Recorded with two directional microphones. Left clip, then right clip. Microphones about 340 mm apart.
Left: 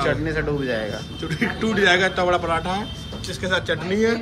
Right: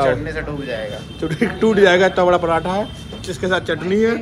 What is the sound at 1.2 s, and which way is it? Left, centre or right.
Speech, centre.